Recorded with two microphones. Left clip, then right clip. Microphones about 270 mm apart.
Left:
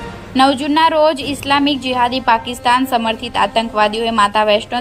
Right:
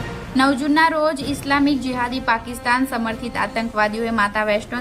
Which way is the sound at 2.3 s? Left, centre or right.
Left.